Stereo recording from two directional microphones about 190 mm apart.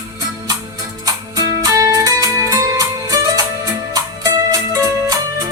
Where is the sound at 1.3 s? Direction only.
20° right (ahead or behind).